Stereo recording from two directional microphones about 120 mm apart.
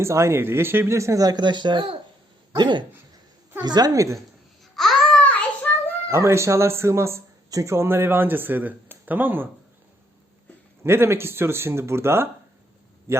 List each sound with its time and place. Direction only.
0.0 s a man's voice: 20° right (ahead or behind)
4.7 s babbling: centre (ahead or behind)
5.7 s a sound: 10° left (ahead or behind)
6.1 s a man's voice: 20° right (ahead or behind)
10.8 s a man's voice: 20° right (ahead or behind)